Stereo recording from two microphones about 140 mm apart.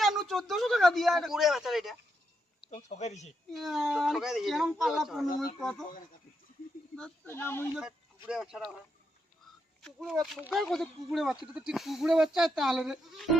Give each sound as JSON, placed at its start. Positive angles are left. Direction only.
{"t": 0.0, "sound": "a man's voice", "side_deg": 0}
{"t": 2.6, "sound": "speech", "side_deg": 55}
{"t": 3.5, "sound": "speech", "side_deg": 0}
{"t": 6.9, "sound": "speech", "side_deg": 10}
{"t": 7.8, "sound": "speech", "side_deg": -5}
{"t": 10.2, "sound": "speech", "side_deg": 0}